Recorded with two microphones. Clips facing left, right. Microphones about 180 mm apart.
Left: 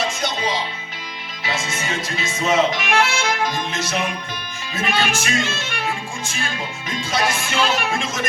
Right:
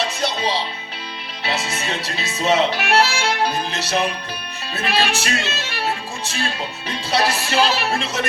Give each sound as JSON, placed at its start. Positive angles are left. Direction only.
{"t": 0.2, "sound": "music", "side_deg": -35}